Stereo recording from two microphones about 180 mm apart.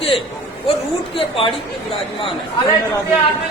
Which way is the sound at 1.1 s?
30° left (ahead or behind).